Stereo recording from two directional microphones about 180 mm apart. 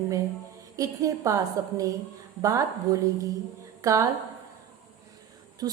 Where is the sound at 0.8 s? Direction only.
20° right (ahead or behind).